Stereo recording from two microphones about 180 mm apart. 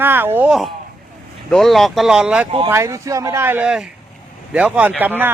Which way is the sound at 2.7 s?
15° right (ahead or behind).